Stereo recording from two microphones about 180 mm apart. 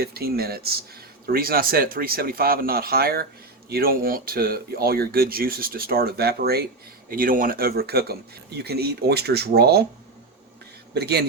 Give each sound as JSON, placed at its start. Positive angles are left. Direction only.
{"t": 0.0, "sound": "speech", "side_deg": -60}
{"t": 10.9, "sound": "speech", "side_deg": -65}